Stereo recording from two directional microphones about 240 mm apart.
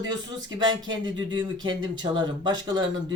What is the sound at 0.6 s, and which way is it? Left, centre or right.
Speech, right.